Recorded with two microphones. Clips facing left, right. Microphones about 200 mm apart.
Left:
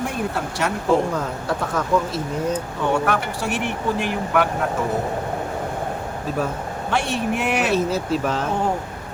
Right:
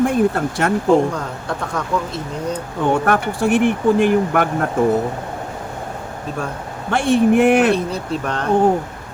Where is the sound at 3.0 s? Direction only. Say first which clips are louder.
Right 6 dB; 55° right (ahead or behind).